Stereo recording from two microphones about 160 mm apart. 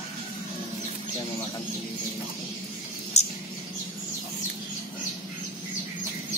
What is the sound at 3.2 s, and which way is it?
Mouse, 45° left (ahead or behind).